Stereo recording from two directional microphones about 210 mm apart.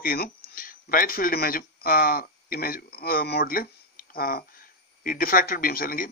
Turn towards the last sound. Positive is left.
turn(degrees=40)  # may be behind; listen again after turning